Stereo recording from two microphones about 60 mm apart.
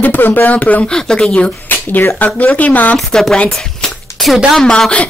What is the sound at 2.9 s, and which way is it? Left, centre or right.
Speech, centre.